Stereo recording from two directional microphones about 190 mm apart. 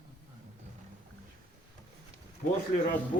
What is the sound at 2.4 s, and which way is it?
Speech, 50° left (ahead or behind).